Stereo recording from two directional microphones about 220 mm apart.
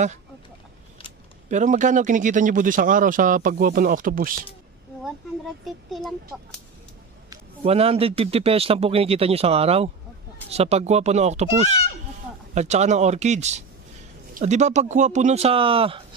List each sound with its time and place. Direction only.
1.5 s speech: 35° right (ahead or behind)
7.2 s a man's voice: 25° right (ahead or behind)